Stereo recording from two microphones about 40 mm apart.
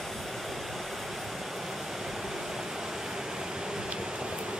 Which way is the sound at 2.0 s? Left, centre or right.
Centre.